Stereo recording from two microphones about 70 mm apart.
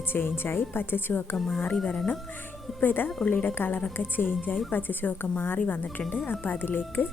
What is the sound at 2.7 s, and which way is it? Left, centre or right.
Speech, left.